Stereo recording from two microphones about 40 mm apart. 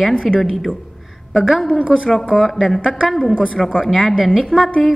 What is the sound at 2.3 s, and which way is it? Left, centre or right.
A woman's voice, centre.